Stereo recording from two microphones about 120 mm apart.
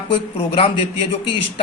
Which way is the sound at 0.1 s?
55° left (ahead or behind).